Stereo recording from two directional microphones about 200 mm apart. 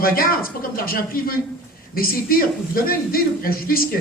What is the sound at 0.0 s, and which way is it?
A woman's voice, 45° left (ahead or behind).